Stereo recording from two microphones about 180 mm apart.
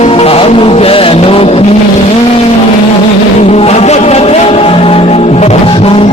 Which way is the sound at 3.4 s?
35° left (ahead or behind).